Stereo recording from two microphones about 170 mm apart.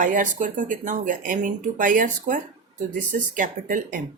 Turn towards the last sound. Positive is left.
turn(degrees=-50)  # may be behind; listen again after turning